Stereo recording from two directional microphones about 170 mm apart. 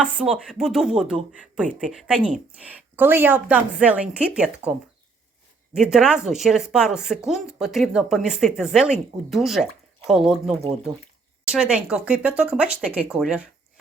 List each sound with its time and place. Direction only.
0.0 s speech: 5° right (ahead or behind)
5.7 s speech: 5° right (ahead or behind)
11.5 s speech: 5° right (ahead or behind)